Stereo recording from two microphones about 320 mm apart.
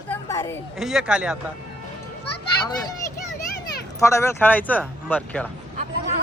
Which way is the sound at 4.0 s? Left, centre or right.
Centre.